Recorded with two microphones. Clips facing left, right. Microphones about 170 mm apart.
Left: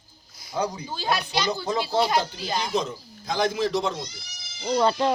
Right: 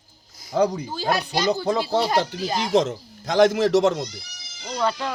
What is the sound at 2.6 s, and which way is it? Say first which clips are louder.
Speech: right 10 dB; 90° right.